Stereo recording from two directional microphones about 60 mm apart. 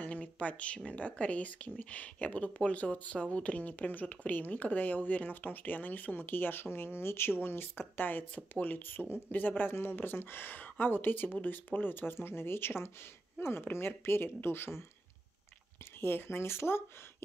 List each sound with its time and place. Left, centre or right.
0.0 s a sound: left
0.7 s speech: centre; by 14.9 s left
16.0 s speech: left